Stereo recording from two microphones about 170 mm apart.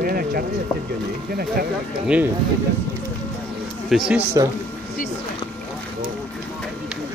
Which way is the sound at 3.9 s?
Centre (ahead or behind).